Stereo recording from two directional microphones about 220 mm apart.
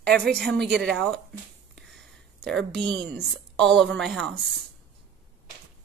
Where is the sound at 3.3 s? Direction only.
Centre (ahead or behind).